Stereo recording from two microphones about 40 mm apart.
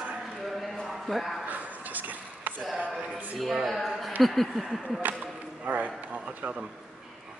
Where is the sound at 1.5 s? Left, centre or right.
Right.